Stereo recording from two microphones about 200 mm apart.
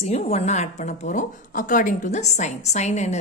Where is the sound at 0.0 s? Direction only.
35° left (ahead or behind).